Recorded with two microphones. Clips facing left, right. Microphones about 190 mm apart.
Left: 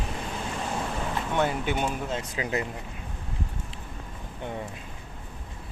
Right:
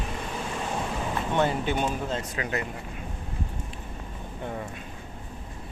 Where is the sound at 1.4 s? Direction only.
10° left (ahead or behind).